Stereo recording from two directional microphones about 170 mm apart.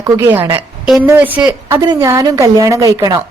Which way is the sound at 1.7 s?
20° right (ahead or behind).